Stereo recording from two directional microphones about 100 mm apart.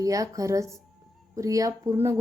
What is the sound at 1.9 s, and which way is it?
Speech, 25° right (ahead or behind).